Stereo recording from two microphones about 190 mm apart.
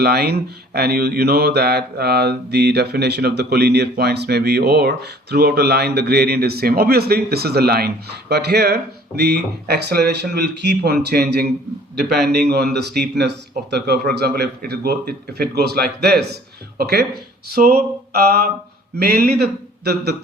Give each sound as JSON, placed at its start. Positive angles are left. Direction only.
{"t": 0.0, "sound": "speech", "side_deg": -55}